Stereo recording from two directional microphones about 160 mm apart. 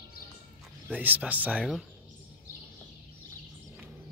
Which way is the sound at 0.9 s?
10° right (ahead or behind).